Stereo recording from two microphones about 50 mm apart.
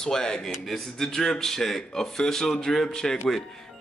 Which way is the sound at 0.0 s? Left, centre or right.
Centre.